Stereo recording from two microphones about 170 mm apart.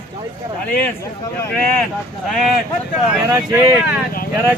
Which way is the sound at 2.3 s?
Centre (ahead or behind).